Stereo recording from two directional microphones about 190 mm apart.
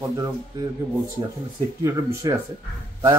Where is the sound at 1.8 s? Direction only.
15° right (ahead or behind).